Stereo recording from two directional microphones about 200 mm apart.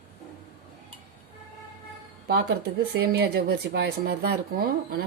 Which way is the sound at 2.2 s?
50° right (ahead or behind).